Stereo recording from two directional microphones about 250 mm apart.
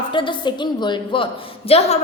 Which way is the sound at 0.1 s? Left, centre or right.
Centre.